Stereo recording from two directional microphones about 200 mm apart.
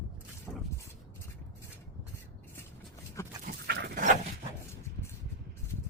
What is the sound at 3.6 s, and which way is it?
Dog, 60° right (ahead or behind).